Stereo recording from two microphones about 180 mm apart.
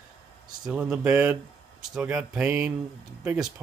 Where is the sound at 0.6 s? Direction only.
5° right (ahead or behind).